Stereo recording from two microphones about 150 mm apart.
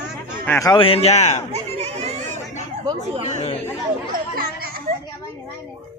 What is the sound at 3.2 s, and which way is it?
Speech, 45° left (ahead or behind).